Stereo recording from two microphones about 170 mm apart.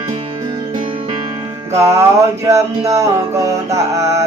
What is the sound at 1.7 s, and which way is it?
Music, 15° right (ahead or behind).